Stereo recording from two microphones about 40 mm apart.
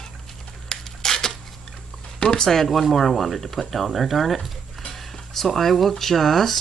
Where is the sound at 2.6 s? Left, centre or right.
Centre.